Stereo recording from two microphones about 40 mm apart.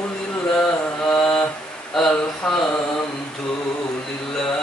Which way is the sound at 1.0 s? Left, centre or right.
Left.